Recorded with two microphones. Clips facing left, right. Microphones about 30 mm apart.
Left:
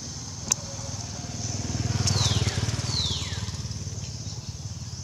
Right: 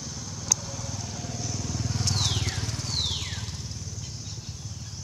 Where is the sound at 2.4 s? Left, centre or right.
Left.